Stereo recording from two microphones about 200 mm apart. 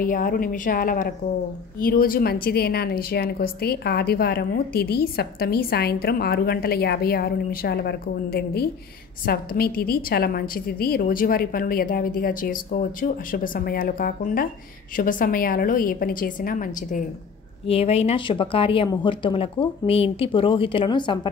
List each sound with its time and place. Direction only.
0.0 s a woman's voice: 45° left (ahead or behind)
17.6 s speech: 30° left (ahead or behind)